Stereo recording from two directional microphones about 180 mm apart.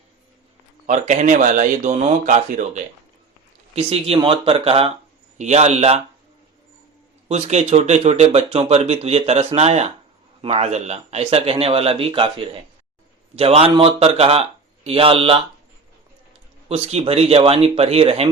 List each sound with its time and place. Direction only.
0.9 s speech: 40° right (ahead or behind)
3.8 s a man's voice: 30° right (ahead or behind)
7.3 s a man's voice: 35° right (ahead or behind)
16.6 s a man's voice: 35° right (ahead or behind)